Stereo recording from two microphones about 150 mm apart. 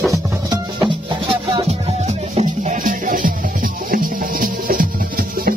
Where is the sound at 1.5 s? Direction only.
45° right (ahead or behind).